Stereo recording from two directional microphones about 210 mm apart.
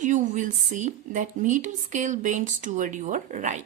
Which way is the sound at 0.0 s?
35° right (ahead or behind).